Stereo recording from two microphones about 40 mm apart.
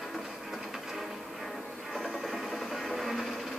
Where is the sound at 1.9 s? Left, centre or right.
Centre.